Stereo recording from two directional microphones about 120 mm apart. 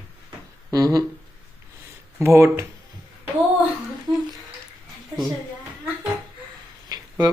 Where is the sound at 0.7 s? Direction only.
30° right (ahead or behind).